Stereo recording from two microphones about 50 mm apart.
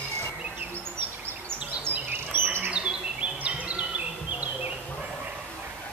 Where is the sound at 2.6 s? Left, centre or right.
Right.